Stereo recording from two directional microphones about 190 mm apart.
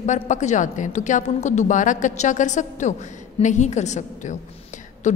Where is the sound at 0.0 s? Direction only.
40° left (ahead or behind).